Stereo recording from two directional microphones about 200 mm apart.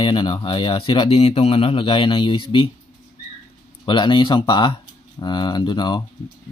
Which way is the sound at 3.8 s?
25° left (ahead or behind).